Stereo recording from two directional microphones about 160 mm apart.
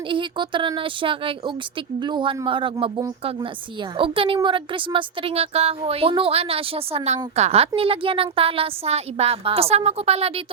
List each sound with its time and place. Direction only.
0.1 s speech: 30° right (ahead or behind)